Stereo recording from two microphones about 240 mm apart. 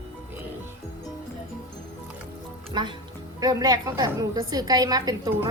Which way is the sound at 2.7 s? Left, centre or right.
Centre.